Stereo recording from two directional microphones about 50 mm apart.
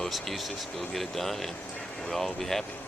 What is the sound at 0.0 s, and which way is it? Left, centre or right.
Speech, centre.